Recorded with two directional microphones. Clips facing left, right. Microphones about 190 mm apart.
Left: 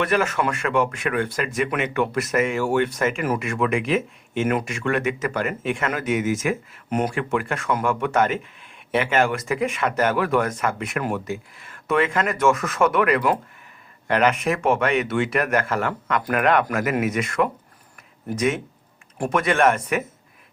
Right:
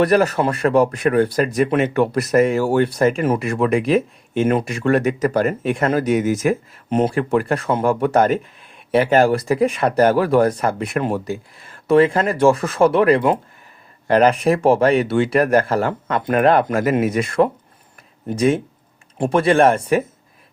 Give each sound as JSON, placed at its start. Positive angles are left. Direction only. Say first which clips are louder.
{"t": 0.0, "sound": "speech", "louder": "right 6 dB", "side_deg": -40}